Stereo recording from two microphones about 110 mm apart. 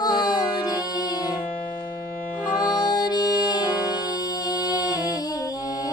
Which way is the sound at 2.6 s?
35° left (ahead or behind).